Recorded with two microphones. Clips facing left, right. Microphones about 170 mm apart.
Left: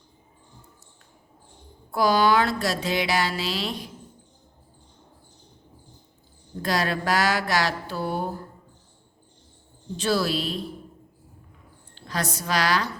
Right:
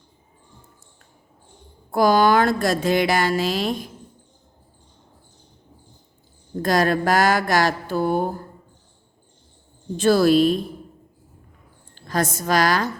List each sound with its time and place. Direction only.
1.9 s speech: 50° right (ahead or behind)
6.6 s speech: 50° right (ahead or behind)
10.0 s speech: 50° right (ahead or behind)
11.9 s a woman's voice: 50° right (ahead or behind)